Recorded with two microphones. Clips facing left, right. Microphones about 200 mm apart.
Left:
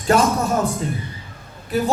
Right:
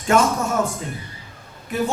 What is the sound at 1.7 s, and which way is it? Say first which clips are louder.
Speech: left 2 dB; 35° left (ahead or behind).